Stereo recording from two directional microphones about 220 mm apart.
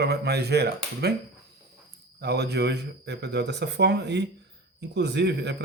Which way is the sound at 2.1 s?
50° right (ahead or behind).